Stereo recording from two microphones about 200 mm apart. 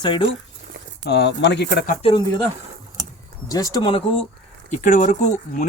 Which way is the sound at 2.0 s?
25° left (ahead or behind).